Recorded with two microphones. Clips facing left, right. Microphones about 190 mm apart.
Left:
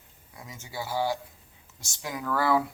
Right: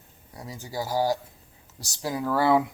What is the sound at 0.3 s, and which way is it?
A man's voice, 35° right (ahead or behind).